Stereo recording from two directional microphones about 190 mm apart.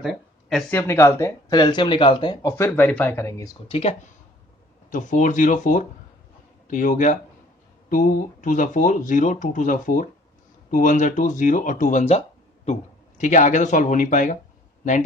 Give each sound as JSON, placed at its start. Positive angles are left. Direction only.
{"t": 0.0, "sound": "speech", "side_deg": 0}
{"t": 0.7, "sound": "speech", "side_deg": 15}
{"t": 2.5, "sound": "speech", "side_deg": 10}
{"t": 3.6, "sound": "speech", "side_deg": 30}
{"t": 4.9, "sound": "speech", "side_deg": 40}
{"t": 13.2, "sound": "speech", "side_deg": 40}